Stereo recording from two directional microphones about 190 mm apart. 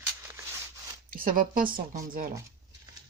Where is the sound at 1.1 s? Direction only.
50° right (ahead or behind).